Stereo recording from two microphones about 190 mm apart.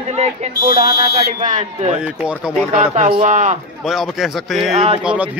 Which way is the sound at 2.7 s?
40° right (ahead or behind).